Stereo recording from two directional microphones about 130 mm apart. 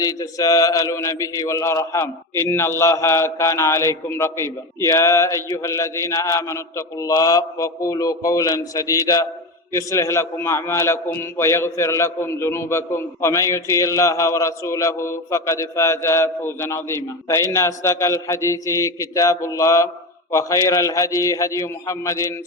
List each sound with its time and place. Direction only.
0.0 s a man's voice: 25° left (ahead or behind)